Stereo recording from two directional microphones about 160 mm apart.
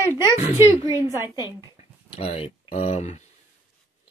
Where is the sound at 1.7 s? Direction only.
40° left (ahead or behind).